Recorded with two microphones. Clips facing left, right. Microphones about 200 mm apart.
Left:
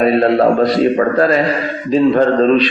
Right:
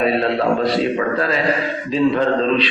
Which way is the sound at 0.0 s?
45° left (ahead or behind).